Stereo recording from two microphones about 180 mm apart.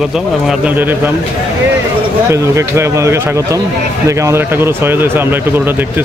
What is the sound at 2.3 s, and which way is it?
Speech, 15° right (ahead or behind).